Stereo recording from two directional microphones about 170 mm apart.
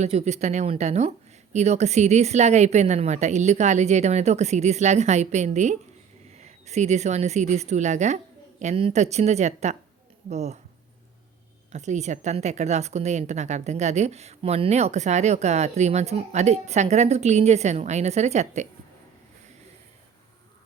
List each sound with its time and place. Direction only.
0.0 s a woman's voice: 40° right (ahead or behind)
11.7 s a woman's voice: 45° right (ahead or behind)